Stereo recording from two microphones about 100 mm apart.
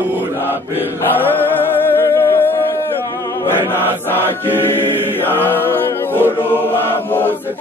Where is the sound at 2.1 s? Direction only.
25° left (ahead or behind).